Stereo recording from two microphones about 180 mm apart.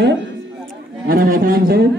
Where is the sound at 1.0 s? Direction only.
55° right (ahead or behind).